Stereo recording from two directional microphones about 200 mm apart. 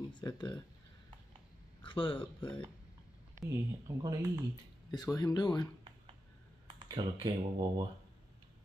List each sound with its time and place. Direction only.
0.1 s speech: 20° left (ahead or behind)
1.8 s speech: 25° left (ahead or behind)
3.3 s speech: 15° right (ahead or behind)
4.9 s speech: 20° left (ahead or behind)
6.7 s speech: 20° right (ahead or behind)